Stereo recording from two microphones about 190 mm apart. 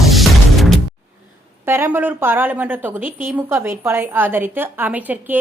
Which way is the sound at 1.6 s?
10° right (ahead or behind).